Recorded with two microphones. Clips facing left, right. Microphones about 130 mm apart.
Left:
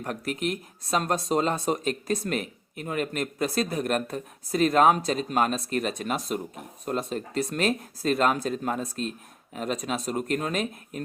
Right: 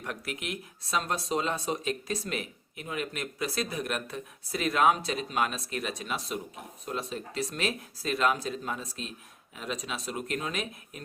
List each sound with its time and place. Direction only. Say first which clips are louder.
0.0 s speech: left 7 dB; 40° left (ahead or behind)